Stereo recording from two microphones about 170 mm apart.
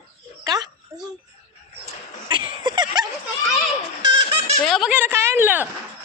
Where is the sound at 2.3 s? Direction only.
25° right (ahead or behind).